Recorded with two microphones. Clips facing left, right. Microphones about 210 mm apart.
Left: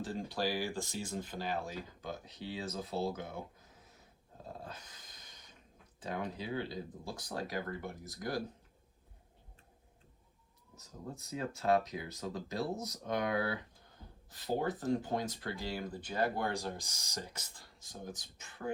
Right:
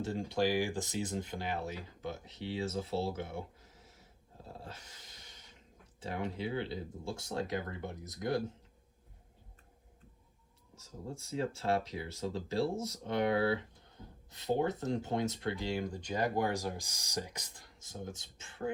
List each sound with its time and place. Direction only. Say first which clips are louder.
0.0 s speech: right 4 dB; 25° right (ahead or behind)
6.3 s speech: right 2 dB; 25° right (ahead or behind)
10.8 s speech: right 2 dB; 30° right (ahead or behind)